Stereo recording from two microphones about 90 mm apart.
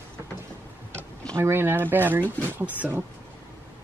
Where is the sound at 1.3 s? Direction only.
30° right (ahead or behind).